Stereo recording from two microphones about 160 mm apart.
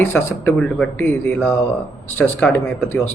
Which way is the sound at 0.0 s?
10° left (ahead or behind).